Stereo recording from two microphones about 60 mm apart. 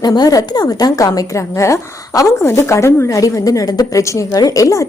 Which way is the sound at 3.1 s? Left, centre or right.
Left.